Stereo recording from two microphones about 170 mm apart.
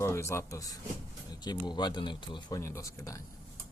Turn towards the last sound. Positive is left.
turn(degrees=20)  # may be behind; listen again after turning